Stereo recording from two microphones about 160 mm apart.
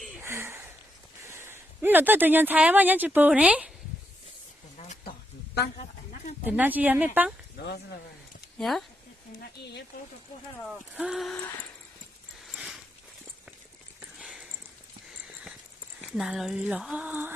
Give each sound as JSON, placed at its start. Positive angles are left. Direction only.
{"t": 0.2, "sound": "a sound", "side_deg": -15}
{"t": 1.3, "sound": "speech", "side_deg": -15}
{"t": 6.4, "sound": "speech", "side_deg": -10}
{"t": 8.5, "sound": "speech", "side_deg": 0}
{"t": 9.4, "sound": "speech", "side_deg": 90}
{"t": 10.7, "sound": "speech", "side_deg": -5}
{"t": 12.5, "sound": "a sound", "side_deg": 0}
{"t": 14.0, "sound": "a sound", "side_deg": -5}
{"t": 16.0, "sound": "speech", "side_deg": -5}